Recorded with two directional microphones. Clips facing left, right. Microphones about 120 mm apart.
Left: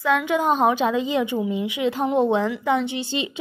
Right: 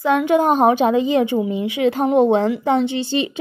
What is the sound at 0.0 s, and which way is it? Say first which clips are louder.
A woman's voice: right 5 dB; 45° right (ahead or behind).